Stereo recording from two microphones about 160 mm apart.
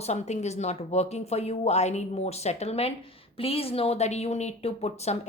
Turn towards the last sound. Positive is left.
turn(degrees=40)  # may be behind; listen again after turning